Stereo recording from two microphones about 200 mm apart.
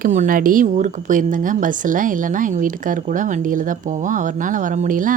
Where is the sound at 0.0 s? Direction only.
40° right (ahead or behind).